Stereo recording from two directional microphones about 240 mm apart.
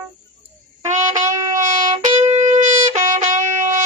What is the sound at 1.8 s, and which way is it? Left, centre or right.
Music, right.